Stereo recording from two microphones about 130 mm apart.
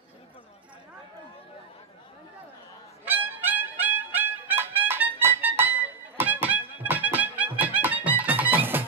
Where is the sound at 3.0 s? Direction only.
15° right (ahead or behind).